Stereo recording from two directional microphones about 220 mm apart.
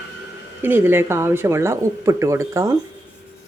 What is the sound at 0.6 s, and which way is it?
Speech, 10° right (ahead or behind).